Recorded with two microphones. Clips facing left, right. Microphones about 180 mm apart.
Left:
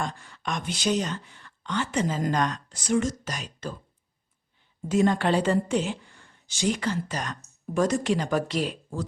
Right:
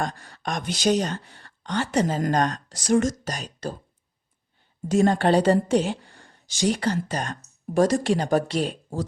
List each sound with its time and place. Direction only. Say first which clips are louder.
0.0 s a woman's voice: right 3 dB; 40° right (ahead or behind)
4.9 s a woman's voice: right 3 dB; 40° right (ahead or behind)